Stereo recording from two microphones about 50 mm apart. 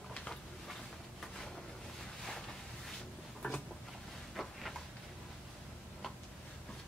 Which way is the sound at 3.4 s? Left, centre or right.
Left.